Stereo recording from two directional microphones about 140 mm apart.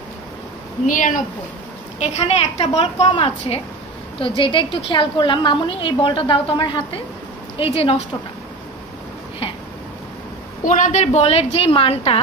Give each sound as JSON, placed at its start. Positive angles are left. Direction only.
{"t": 0.8, "sound": "speech", "side_deg": 70}
{"t": 2.1, "sound": "a woman's voice", "side_deg": 45}
{"t": 10.6, "sound": "a woman's voice", "side_deg": 65}